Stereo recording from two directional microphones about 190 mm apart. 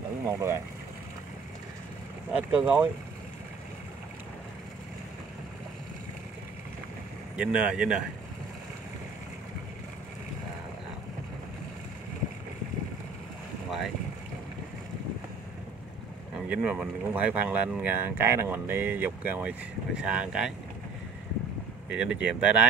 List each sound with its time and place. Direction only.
0.3 s speech: 15° right (ahead or behind)
2.3 s speech: 5° right (ahead or behind)
7.3 s speech: 5° right (ahead or behind)
13.7 s boat: centre (ahead or behind)
16.3 s speech: 5° right (ahead or behind)
21.8 s speech: 5° right (ahead or behind)